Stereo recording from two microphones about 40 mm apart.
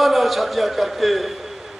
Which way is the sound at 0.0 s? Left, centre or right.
Centre.